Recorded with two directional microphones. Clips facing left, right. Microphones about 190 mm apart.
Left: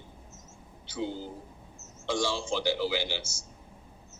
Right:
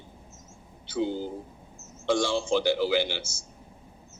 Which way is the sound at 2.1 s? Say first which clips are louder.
Right 5 dB; 55° right (ahead or behind).